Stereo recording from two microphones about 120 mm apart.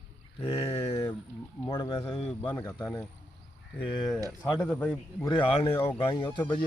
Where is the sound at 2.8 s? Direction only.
25° left (ahead or behind).